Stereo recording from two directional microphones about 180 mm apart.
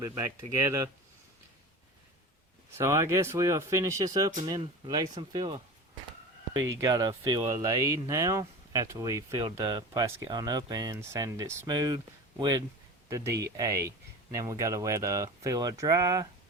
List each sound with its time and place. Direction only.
0.2 s speech: 15° right (ahead or behind)
2.7 s speech: 15° right (ahead or behind)